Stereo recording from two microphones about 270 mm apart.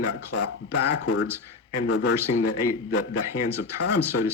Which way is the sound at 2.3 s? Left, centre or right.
Left.